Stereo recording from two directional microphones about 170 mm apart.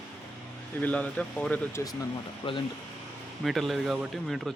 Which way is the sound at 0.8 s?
10° left (ahead or behind).